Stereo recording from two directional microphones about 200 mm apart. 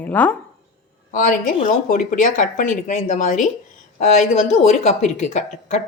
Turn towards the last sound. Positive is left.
turn(degrees=35)  # may be behind; listen again after turning